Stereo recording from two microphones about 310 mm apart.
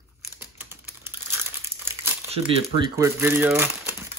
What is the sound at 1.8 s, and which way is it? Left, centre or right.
Crumpling, centre.